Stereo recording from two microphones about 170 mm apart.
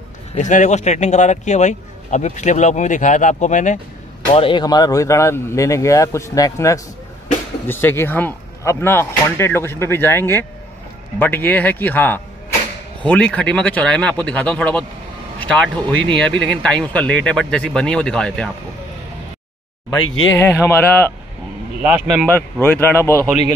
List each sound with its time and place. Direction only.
0.3 s speech: 45° left (ahead or behind)
4.4 s speech: 30° left (ahead or behind); by 18.5 s 5° left (ahead or behind)
19.9 s speech: 20° left (ahead or behind)
21.8 s speech: 5° right (ahead or behind)
22.2 s speech: 10° left (ahead or behind)